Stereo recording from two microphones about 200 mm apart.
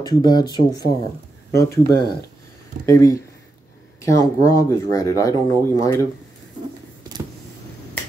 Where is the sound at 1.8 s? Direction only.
50° right (ahead or behind).